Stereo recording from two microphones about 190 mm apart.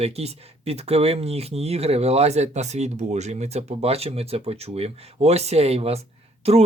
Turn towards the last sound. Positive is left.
turn(degrees=-35)  # may be behind; listen again after turning